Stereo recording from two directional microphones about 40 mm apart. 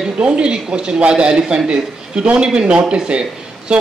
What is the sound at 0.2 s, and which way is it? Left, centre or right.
Speech, right.